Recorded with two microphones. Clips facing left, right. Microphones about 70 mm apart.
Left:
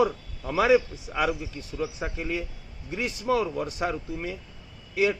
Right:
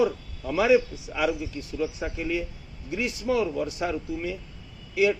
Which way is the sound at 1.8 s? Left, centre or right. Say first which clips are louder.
Right 1 dB; left.